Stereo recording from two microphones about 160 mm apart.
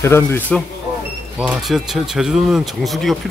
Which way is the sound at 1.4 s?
Centre (ahead or behind).